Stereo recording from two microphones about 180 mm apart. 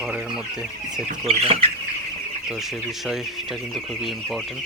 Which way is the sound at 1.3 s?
35° right (ahead or behind).